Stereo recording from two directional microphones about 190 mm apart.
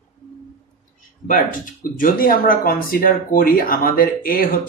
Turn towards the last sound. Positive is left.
turn(degrees=50)  # may be behind; listen again after turning